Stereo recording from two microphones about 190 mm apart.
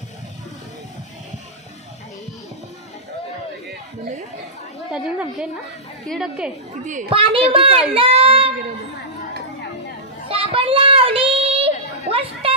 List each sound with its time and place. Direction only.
4.9 s a woman's voice: 5° right (ahead or behind)
6.8 s a woman's voice: 40° right (ahead or behind)
7.1 s a woman's voice: 30° right (ahead or behind)
10.2 s a sound: 30° right (ahead or behind)